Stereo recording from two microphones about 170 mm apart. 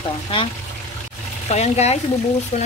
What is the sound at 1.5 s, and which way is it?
Speech, 40° left (ahead or behind).